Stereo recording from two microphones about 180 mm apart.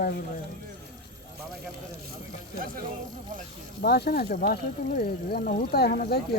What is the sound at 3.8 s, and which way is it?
Speech, 60° left (ahead or behind).